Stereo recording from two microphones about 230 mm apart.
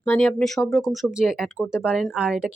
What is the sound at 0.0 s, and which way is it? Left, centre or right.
Speech, centre.